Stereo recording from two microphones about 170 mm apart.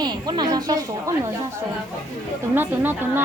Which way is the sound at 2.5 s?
10° right (ahead or behind).